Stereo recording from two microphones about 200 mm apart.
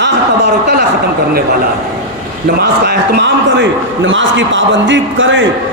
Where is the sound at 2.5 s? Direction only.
50° right (ahead or behind).